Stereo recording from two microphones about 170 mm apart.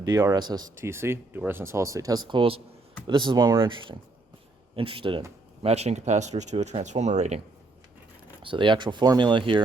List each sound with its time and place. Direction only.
0.0 s speech: 20° right (ahead or behind); by 7.4 s 40° right (ahead or behind)
8.4 s speech: 30° right (ahead or behind)